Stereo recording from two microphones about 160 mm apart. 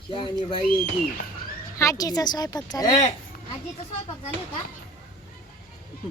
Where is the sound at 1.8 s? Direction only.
20° left (ahead or behind).